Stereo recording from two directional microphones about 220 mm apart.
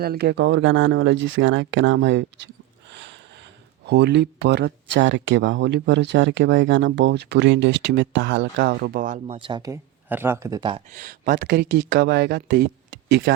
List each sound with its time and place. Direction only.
0.0 s speech: 45° right (ahead or behind)
2.9 s a sound: 55° right (ahead or behind)
3.8 s speech: 50° right (ahead or behind); by 10.8 s 20° right (ahead or behind)
10.9 s speech: 40° right (ahead or behind)